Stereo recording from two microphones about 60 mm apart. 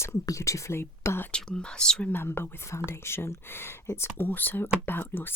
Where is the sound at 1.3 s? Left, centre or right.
Centre.